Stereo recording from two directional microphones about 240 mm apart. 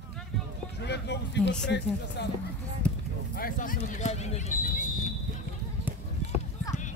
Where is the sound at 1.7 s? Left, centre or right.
Left.